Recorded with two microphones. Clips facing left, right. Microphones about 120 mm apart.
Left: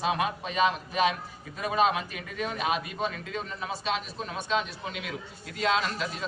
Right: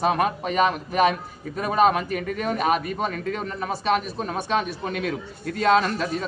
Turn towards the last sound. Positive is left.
turn(degrees=-50)  # may be behind; listen again after turning